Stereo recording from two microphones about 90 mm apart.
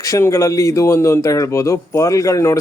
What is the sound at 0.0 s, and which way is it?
Speech, 35° left (ahead or behind).